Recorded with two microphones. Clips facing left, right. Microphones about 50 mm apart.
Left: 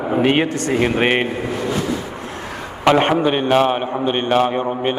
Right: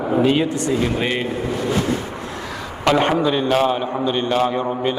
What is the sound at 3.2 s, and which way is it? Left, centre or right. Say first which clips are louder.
A man's voice: left 2 dB; left.